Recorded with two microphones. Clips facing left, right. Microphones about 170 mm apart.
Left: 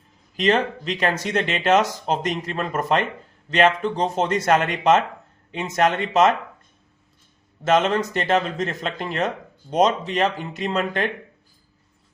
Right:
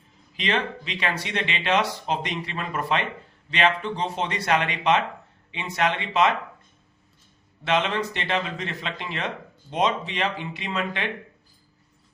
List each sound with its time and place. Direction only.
0.3 s speech: 45° left (ahead or behind)
7.6 s speech: 45° left (ahead or behind)